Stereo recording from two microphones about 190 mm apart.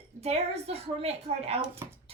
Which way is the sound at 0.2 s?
35° right (ahead or behind).